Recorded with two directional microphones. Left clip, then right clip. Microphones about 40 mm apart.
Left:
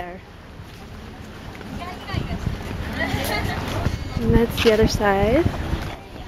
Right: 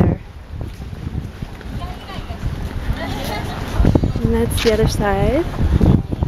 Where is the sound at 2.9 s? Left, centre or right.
Centre.